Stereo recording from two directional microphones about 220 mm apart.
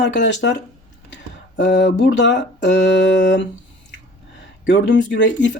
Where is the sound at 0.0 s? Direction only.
55° left (ahead or behind).